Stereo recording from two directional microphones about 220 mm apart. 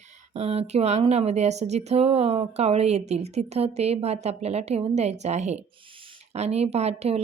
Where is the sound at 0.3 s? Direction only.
30° right (ahead or behind).